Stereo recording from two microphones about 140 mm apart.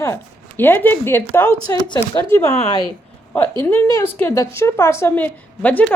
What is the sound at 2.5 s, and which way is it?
Speech, 50° left (ahead or behind).